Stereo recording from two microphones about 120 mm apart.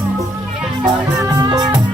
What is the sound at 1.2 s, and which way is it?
Music, 30° right (ahead or behind).